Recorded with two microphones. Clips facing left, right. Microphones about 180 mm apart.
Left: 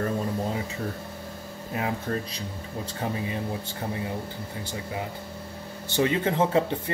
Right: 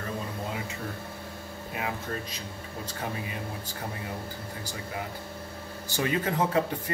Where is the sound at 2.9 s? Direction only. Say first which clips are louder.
Left 5 dB; 30° left (ahead or behind).